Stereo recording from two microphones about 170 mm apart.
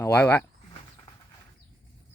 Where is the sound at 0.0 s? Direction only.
10° left (ahead or behind).